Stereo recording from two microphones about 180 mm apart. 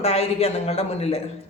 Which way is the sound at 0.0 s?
35° left (ahead or behind).